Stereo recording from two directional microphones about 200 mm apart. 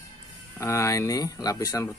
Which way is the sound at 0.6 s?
15° left (ahead or behind).